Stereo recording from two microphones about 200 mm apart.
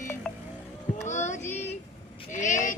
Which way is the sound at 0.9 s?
35° left (ahead or behind).